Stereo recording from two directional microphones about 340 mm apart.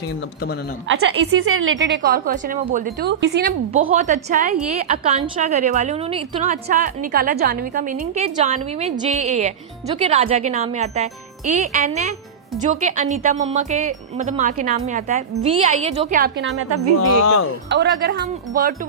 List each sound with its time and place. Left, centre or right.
0.9 s a woman's voice: right
17.2 s speech: left
17.7 s a woman's voice: right